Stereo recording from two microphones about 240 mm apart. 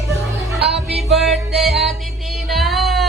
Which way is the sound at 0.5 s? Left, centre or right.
Right.